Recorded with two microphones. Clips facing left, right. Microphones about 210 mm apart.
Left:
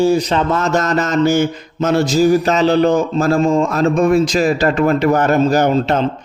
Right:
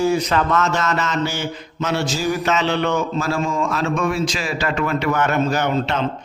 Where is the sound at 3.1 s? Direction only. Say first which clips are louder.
Left 7 dB; 50° left (ahead or behind).